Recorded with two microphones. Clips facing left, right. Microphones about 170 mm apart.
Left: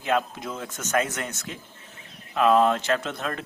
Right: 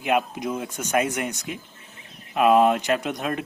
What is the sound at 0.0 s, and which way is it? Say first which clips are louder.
Speech: right 2 dB; 15° right (ahead or behind).